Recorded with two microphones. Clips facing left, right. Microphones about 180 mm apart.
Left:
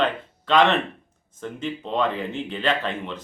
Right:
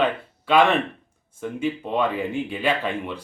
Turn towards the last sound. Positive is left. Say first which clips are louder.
# right 1 dB
turn(degrees=-10)  # may be behind; listen again after turning